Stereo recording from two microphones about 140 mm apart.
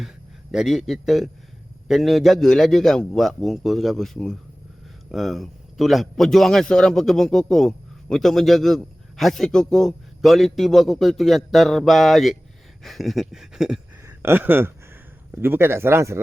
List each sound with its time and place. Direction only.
0.5 s a man's voice: centre (ahead or behind)
14.2 s speech: 15° right (ahead or behind)